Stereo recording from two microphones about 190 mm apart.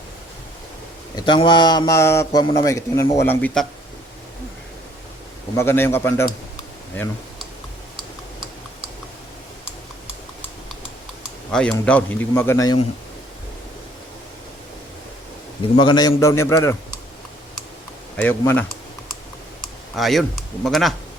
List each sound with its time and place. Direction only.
1.1 s a man's voice: 25° left (ahead or behind); by 3.7 s 5° left (ahead or behind)
5.5 s a man's voice: 10° left (ahead or behind)
11.5 s a man's voice: 5° left (ahead or behind)
15.7 s a man's voice: 25° left (ahead or behind)
18.2 s a man's voice: 10° left (ahead or behind)
20.0 s speech: centre (ahead or behind)